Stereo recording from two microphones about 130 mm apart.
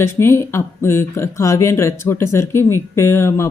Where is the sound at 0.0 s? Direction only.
20° left (ahead or behind).